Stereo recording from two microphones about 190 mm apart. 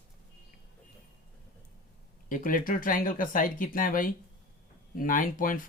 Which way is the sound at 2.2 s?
45° left (ahead or behind).